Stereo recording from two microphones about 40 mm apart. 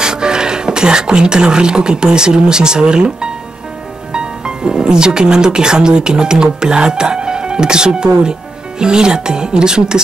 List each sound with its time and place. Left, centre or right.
0.0 s speech: centre